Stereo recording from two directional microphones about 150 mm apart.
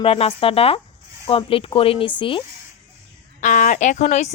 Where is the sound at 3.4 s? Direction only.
55° left (ahead or behind).